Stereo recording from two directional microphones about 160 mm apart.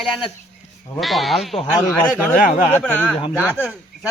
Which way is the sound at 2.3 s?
55° left (ahead or behind).